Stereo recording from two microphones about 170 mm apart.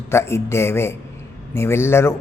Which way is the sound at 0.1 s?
15° left (ahead or behind).